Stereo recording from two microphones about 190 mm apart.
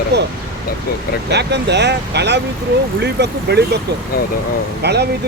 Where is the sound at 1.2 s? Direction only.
65° right (ahead or behind).